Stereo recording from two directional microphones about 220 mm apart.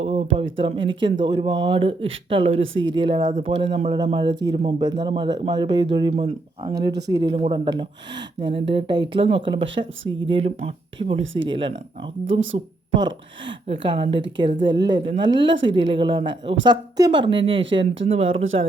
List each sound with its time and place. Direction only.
0.0 s a sound: 30° right (ahead or behind)
0.5 s a man's voice: 20° right (ahead or behind)
2.6 s speech: 60° right (ahead or behind)
2.9 s a man's voice: 20° right (ahead or behind)
3.2 s a man's voice: 35° right (ahead or behind)
12.2 s a woman's voice: 60° right (ahead or behind)
13.7 s a man's voice: 25° right (ahead or behind)